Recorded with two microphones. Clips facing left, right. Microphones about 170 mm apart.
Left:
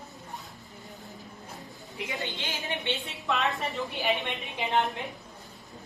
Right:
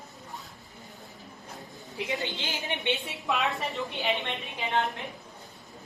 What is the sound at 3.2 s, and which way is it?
Speech, centre (ahead or behind).